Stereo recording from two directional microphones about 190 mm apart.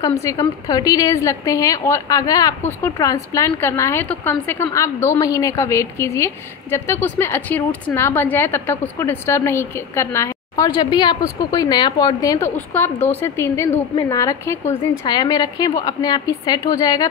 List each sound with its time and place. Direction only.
0.2 s a woman's voice: 20° left (ahead or behind)